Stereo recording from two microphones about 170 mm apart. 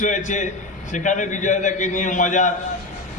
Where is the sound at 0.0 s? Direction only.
45° left (ahead or behind).